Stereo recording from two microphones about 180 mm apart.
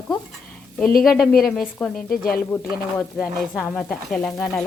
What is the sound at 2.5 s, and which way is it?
Speech, 15° left (ahead or behind).